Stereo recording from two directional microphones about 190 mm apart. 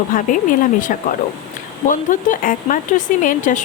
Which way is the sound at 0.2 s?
45° left (ahead or behind).